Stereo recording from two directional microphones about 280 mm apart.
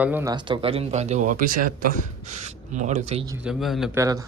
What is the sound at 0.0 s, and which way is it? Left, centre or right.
Speech, centre.